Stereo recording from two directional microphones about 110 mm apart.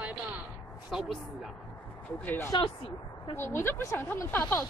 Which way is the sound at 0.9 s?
Centre (ahead or behind).